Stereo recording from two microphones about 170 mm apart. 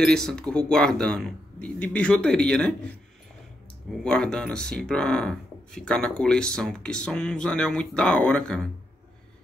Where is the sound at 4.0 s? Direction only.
5° left (ahead or behind).